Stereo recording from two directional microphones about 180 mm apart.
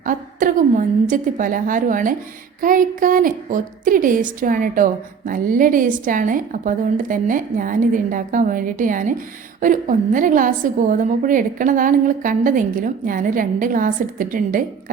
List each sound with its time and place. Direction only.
0.0 s a woman's voice: 50° right (ahead or behind)